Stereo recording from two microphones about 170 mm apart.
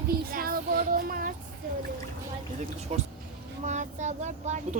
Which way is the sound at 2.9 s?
40° right (ahead or behind).